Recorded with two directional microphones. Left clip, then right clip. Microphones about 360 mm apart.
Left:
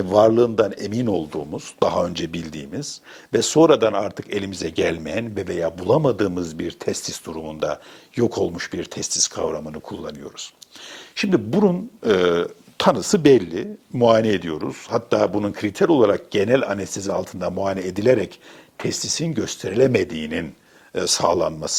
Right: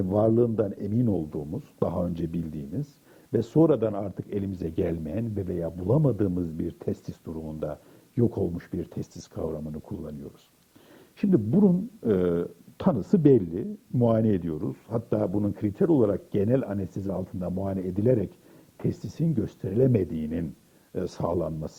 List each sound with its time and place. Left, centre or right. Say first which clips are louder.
0.0 s speech: left 8 dB; centre
5.8 s a man's voice: left 8 dB; left
6.1 s speech: left 7 dB; centre
7.3 s a man's voice: left 7 dB; left
7.6 s speech: left 12 dB; centre